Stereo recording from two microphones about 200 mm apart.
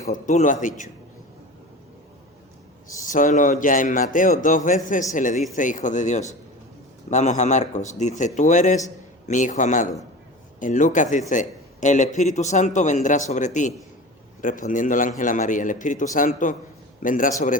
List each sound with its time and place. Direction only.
0.1 s a man's voice: 40° left (ahead or behind)
3.0 s a man's voice: 40° left (ahead or behind)